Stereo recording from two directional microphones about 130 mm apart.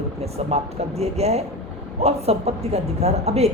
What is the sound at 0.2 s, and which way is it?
A woman's voice, 55° right (ahead or behind).